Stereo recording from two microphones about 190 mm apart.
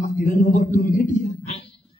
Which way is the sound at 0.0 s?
40° left (ahead or behind).